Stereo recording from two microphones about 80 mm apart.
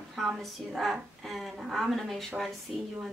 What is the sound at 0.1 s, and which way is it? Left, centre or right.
A woman's voice, centre.